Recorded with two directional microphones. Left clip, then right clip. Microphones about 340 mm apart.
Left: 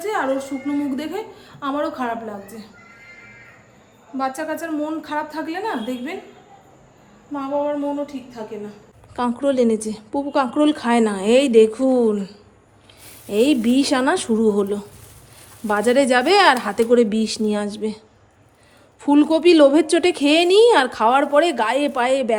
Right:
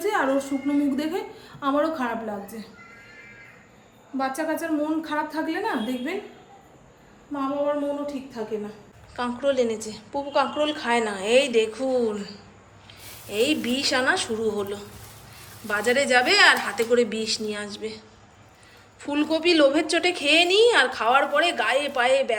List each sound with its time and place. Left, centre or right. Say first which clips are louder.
0.0 s a woman's voice: left 1 dB; centre
4.2 s a woman's voice: left 2 dB; centre
9.1 s a woman's voice: left 4 dB; centre
19.0 s a woman's voice: left 8 dB; centre